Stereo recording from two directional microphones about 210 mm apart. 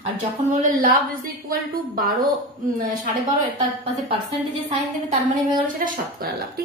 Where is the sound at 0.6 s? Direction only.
40° right (ahead or behind).